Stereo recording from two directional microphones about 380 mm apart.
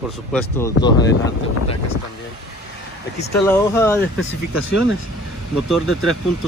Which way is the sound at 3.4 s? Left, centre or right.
Centre.